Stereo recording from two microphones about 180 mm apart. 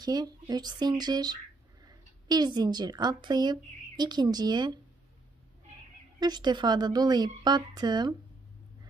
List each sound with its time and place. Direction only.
0.0 s a woman's voice: 20° right (ahead or behind)
6.1 s a woman's voice: 25° right (ahead or behind)